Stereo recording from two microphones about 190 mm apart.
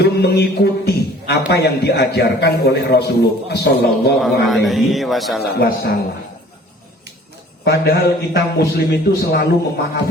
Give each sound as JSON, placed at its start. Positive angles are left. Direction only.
{"t": 0.0, "sound": "a man's voice", "side_deg": 60}
{"t": 4.2, "sound": "a man's voice", "side_deg": 0}
{"t": 5.4, "sound": "a man's voice", "side_deg": 60}
{"t": 7.6, "sound": "a man's voice", "side_deg": 60}